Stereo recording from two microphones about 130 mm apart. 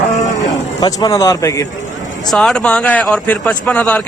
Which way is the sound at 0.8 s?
30° left (ahead or behind).